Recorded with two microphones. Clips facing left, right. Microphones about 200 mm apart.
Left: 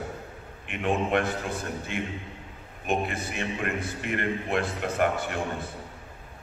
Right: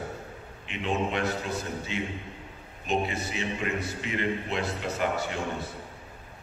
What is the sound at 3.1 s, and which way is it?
A man's voice, 55° left (ahead or behind).